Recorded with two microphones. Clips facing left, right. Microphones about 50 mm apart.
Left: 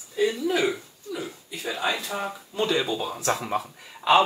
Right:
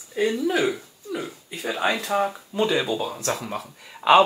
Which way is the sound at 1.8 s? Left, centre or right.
Right.